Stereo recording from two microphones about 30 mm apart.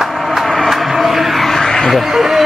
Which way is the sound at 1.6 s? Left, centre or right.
Centre.